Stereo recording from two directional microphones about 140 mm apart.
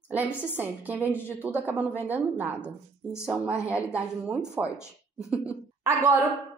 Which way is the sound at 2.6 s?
20° left (ahead or behind).